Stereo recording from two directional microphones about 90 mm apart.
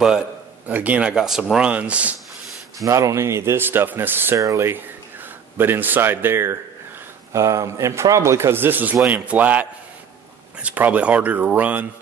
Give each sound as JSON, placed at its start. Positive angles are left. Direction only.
{"t": 0.7, "sound": "speech", "side_deg": -15}
{"t": 2.8, "sound": "speech", "side_deg": -35}
{"t": 4.4, "sound": "a man's voice", "side_deg": -40}
{"t": 5.6, "sound": "a man's voice", "side_deg": -20}